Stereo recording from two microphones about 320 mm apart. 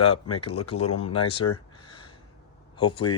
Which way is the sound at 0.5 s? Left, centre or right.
Left.